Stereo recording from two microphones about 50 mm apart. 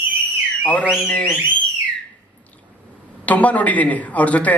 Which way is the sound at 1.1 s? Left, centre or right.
Left.